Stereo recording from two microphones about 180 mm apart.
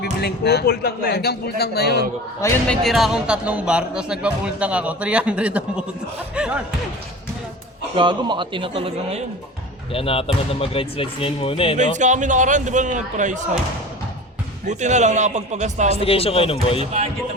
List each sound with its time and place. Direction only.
0.0 s a man's voice: 65° left (ahead or behind)
2.6 s speech: centre (ahead or behind)
7.9 s a man's voice: 25° right (ahead or behind)
9.9 s speech: 30° left (ahead or behind)
11.8 s speech: 45° right (ahead or behind)
14.7 s a man's voice: 40° right (ahead or behind)
16.0 s speech: 30° left (ahead or behind)